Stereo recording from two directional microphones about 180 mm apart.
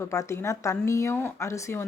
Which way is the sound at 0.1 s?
15° left (ahead or behind).